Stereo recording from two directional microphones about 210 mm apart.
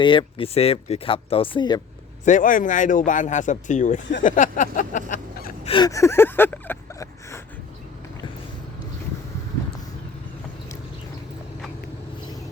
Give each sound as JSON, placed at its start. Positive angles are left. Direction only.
{"t": 0.0, "sound": "speech", "side_deg": 25}
{"t": 2.2, "sound": "speech", "side_deg": 40}
{"t": 5.7, "sound": "a sound", "side_deg": 15}